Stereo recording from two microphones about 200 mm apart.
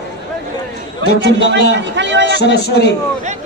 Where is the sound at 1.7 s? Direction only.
65° right (ahead or behind).